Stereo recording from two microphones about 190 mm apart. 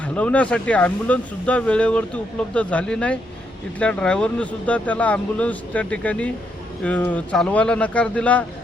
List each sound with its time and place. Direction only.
0.0 s speech: 5° left (ahead or behind)